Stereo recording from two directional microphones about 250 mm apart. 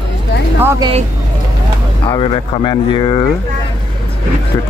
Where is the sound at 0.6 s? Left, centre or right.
Centre.